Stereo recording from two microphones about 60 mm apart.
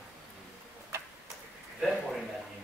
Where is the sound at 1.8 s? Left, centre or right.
Centre.